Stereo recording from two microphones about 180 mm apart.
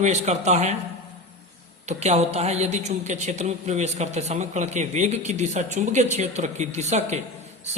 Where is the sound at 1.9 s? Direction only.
35° right (ahead or behind).